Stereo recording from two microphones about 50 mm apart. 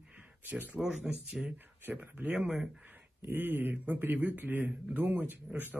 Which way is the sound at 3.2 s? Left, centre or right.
Right.